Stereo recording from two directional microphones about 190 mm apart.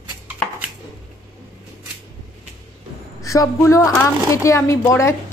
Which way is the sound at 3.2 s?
15° left (ahead or behind).